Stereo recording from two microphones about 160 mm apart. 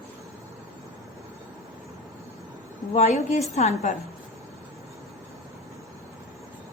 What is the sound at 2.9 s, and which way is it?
A woman's voice, 40° left (ahead or behind).